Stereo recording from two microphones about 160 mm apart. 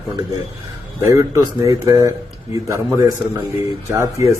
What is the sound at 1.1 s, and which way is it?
A man's voice, 20° right (ahead or behind).